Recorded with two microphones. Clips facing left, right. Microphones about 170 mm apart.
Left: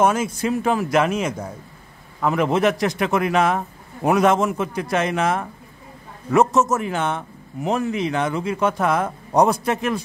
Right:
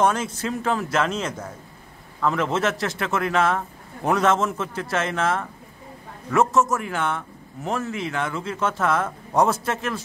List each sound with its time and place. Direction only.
0.0 s a man's voice: 10° left (ahead or behind)